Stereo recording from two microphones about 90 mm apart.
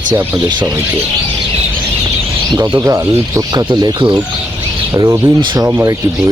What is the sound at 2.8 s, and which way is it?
Speech, 35° right (ahead or behind).